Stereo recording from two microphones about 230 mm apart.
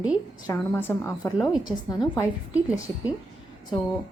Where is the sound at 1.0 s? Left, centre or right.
Centre.